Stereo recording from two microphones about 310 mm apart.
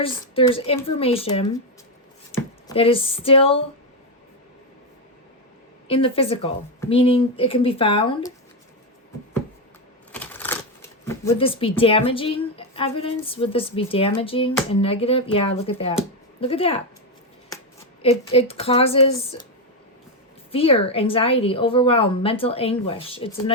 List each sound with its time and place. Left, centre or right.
0.0 s a woman's voice: centre
5.9 s a woman's voice: centre
10.1 s typewriter: centre
11.0 s a woman's voice: centre
18.0 s a woman's voice: centre
20.5 s a woman's voice: centre